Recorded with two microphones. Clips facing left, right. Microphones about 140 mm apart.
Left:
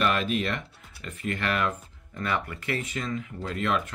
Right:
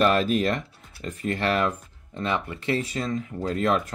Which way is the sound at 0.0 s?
40° right (ahead or behind).